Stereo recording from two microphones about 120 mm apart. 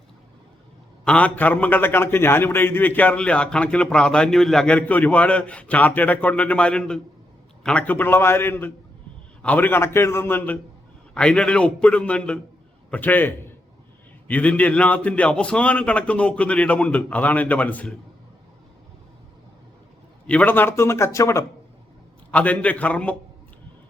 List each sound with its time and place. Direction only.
1.0 s a man's voice: 10° left (ahead or behind)
20.2 s a man's voice: 10° left (ahead or behind)
22.3 s a man's voice: 10° left (ahead or behind)